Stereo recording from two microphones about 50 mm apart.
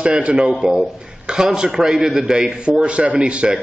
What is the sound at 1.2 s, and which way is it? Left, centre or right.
A man's voice, centre.